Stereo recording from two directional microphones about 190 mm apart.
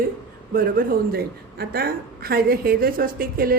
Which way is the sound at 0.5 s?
50° right (ahead or behind).